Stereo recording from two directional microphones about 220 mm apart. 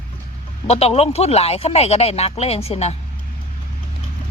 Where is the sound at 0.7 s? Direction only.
30° left (ahead or behind).